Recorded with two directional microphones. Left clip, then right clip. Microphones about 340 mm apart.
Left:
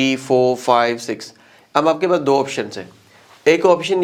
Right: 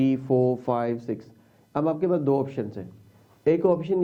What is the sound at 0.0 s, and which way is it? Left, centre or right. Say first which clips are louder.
Speech: left 7 dB; centre.